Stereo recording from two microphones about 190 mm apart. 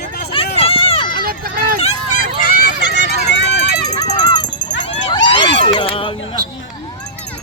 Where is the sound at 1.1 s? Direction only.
50° right (ahead or behind).